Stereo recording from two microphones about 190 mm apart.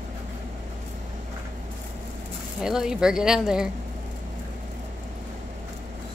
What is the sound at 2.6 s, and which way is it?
Speech, 5° right (ahead or behind).